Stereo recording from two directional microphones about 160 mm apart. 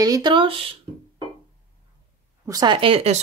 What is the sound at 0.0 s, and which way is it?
Speech, 25° right (ahead or behind).